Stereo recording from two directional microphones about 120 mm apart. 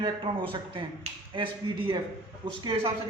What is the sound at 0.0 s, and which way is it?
A woman's voice, 45° right (ahead or behind).